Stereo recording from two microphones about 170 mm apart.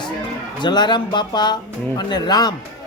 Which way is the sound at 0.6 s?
25° left (ahead or behind).